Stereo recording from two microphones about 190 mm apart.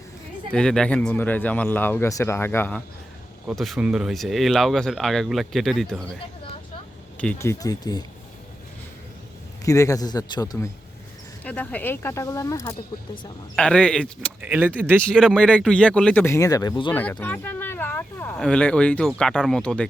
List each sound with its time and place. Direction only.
0.5 s speech: 5° left (ahead or behind)
7.2 s speech: 10° left (ahead or behind)
9.6 s a man's voice: 15° left (ahead or behind)
11.4 s speech: 5° left (ahead or behind)
13.6 s speech: 5° left (ahead or behind)
14.4 s speech: 10° right (ahead or behind)
15.0 s speech: centre (ahead or behind); by 16.9 s 20° left (ahead or behind)
16.9 s speech: 10° left (ahead or behind)